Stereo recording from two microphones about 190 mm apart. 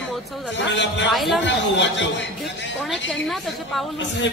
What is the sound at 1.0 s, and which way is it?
Speech, centre (ahead or behind).